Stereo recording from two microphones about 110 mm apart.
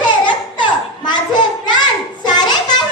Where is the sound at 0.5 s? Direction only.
45° left (ahead or behind).